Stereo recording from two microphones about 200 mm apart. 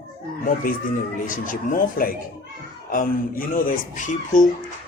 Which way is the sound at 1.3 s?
45° left (ahead or behind).